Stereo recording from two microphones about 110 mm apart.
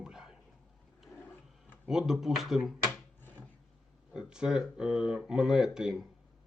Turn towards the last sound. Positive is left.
turn(degrees=-5)  # may be behind; listen again after turning